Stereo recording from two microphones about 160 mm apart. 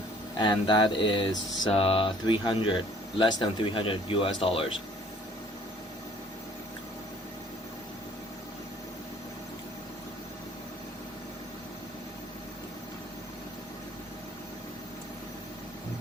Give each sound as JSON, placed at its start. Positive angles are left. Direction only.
{"t": 0.3, "sound": "mantra", "side_deg": 30}